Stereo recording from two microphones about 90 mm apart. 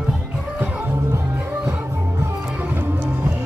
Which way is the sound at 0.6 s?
15° right (ahead or behind).